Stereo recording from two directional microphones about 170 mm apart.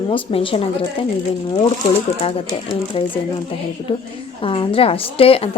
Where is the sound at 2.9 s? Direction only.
35° left (ahead or behind).